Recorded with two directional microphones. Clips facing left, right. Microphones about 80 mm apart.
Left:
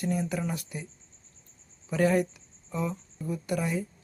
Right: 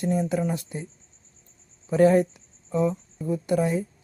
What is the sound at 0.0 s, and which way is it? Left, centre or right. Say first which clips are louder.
Speech: right 5 dB; right.